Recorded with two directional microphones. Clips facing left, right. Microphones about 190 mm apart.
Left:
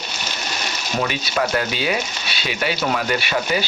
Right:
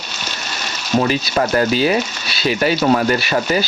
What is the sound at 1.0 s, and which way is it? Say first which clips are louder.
Speech: right 5 dB; 40° right (ahead or behind).